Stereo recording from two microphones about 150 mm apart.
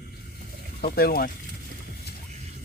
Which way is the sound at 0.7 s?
85° left.